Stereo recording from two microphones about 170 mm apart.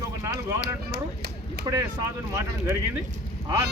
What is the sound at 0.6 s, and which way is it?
Speech, 75° right (ahead or behind).